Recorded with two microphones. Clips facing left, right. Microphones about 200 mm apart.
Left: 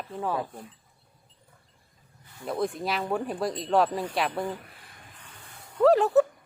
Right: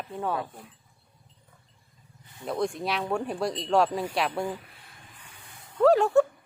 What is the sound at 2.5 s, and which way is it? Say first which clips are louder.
A child's voice: even; centre (ahead or behind).